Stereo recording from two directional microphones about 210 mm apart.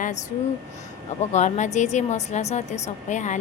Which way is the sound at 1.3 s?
35° left (ahead or behind).